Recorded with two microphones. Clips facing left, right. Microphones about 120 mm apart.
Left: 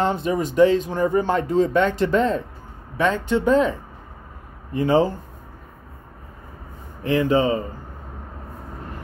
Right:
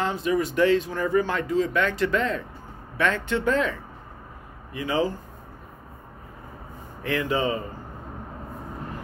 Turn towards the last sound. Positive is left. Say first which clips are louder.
# left 6 dB
turn(degrees=30)  # may be behind; listen again after turning